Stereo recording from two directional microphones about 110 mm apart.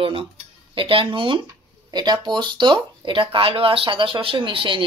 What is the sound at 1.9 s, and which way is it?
Speech, 40° right (ahead or behind).